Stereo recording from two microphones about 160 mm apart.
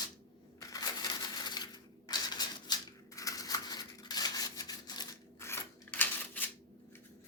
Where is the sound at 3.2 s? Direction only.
20° left (ahead or behind).